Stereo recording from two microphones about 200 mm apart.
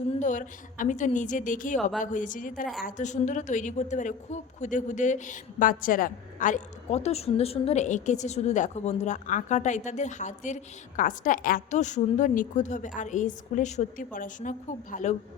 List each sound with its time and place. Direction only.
0.2 s speech: 40° left (ahead or behind)